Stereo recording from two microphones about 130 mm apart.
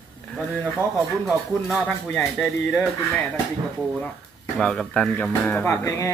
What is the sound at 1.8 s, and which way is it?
Speech, centre (ahead or behind).